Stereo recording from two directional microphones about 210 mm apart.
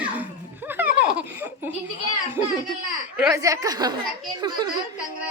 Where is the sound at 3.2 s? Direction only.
15° right (ahead or behind).